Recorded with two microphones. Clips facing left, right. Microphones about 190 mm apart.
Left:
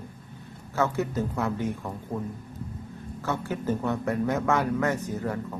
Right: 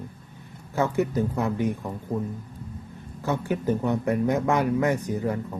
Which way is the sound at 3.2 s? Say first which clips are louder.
Right 4 dB; 15° right (ahead or behind).